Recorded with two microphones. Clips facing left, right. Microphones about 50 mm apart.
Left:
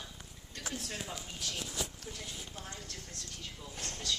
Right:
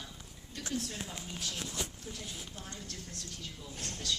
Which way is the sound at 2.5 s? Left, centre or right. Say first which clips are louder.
Even; left.